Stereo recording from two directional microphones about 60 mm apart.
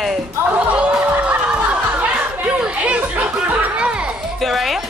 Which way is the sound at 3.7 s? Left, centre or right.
Centre.